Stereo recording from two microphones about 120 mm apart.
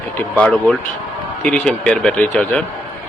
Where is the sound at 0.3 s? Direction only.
10° left (ahead or behind).